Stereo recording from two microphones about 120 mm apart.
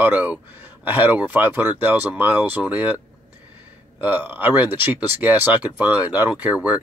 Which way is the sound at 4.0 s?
15° right (ahead or behind).